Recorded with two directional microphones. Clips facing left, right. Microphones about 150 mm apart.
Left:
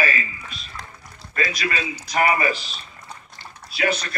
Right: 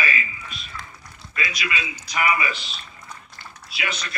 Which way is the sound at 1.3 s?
40° left (ahead or behind).